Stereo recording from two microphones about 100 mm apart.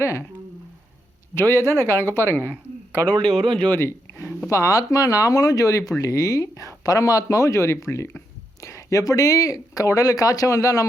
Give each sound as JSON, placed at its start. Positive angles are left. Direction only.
{"t": 0.0, "sound": "speech", "side_deg": 30}
{"t": 1.4, "sound": "speech", "side_deg": 25}
{"t": 3.8, "sound": "a sound", "side_deg": 25}
{"t": 4.4, "sound": "speech", "side_deg": 35}